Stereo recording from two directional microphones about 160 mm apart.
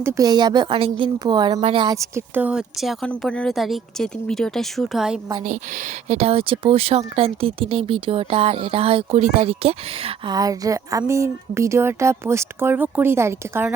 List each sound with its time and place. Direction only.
0.0 s speech: 25° right (ahead or behind); by 5.2 s 5° right (ahead or behind)
6.1 s speech: 40° right (ahead or behind)
10.3 s speech: 20° right (ahead or behind)